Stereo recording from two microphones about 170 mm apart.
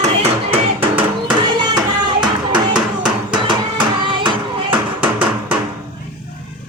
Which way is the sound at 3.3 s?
25° right (ahead or behind).